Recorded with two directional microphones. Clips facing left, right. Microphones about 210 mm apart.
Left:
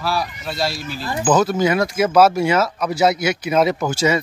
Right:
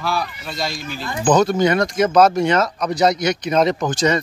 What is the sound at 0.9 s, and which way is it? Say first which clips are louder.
Speech: left 2 dB; 35° left (ahead or behind).